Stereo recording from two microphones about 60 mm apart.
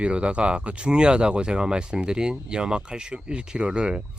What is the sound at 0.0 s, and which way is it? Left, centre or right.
Speech, centre.